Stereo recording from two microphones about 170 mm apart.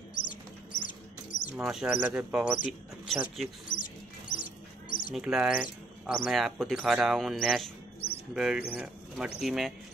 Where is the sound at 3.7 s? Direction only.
50° left (ahead or behind).